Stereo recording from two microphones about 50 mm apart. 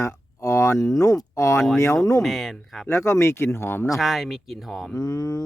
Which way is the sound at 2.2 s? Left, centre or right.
Centre.